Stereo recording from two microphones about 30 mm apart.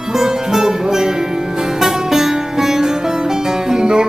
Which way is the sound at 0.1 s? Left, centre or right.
Centre.